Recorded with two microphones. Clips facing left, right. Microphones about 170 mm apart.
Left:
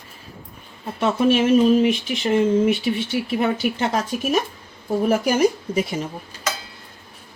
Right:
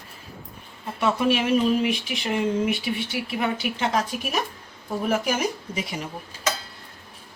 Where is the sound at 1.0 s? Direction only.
40° left (ahead or behind).